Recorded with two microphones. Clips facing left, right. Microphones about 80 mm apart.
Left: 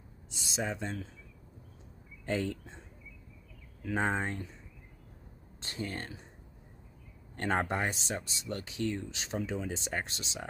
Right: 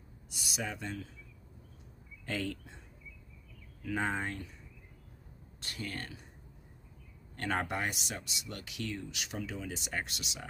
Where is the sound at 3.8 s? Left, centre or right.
Left.